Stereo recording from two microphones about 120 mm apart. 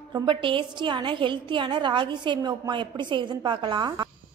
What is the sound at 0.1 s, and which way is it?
A woman's voice, 40° right (ahead or behind).